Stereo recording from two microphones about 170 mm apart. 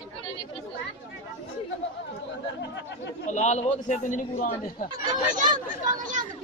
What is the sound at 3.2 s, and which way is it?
A man's voice, 45° left (ahead or behind).